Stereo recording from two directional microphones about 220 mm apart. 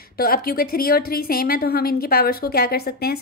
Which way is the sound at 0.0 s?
40° left (ahead or behind).